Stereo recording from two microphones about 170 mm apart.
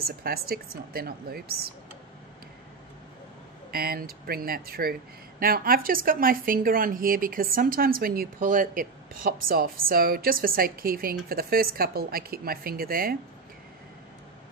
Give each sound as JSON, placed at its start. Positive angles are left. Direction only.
{"t": 0.0, "sound": "speech", "side_deg": -65}
{"t": 3.7, "sound": "speech", "side_deg": -60}